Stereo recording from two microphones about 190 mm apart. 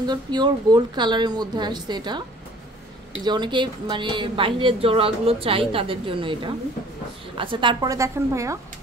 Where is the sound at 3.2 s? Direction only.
25° right (ahead or behind).